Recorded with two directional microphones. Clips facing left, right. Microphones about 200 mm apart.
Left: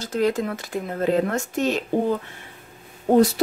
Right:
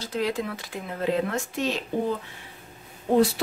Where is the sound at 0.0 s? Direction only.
45° left (ahead or behind).